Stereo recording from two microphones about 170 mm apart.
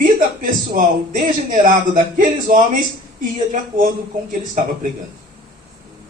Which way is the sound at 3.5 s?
50° right (ahead or behind).